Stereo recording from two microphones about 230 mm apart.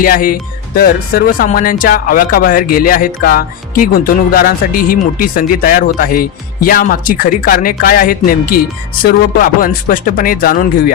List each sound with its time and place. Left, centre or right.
0.0 s speech: left